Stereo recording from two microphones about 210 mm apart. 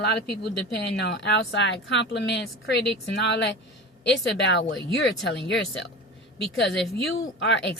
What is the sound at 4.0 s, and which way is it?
Speech, 55° left (ahead or behind).